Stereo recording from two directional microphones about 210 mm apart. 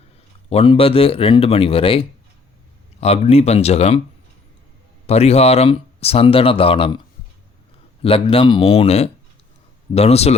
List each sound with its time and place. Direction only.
0.5 s speech: 25° left (ahead or behind)
5.0 s speech: 30° left (ahead or behind)
8.0 s speech: 25° left (ahead or behind)